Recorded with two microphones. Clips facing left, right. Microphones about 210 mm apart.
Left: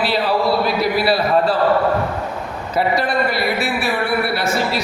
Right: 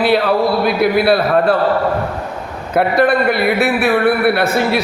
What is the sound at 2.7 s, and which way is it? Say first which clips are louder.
A man's voice: right 6 dB; 55° right (ahead or behind).